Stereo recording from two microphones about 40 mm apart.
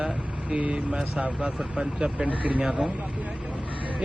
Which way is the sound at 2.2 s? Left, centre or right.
Right.